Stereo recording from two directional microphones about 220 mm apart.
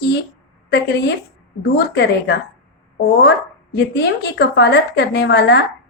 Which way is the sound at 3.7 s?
50° left (ahead or behind).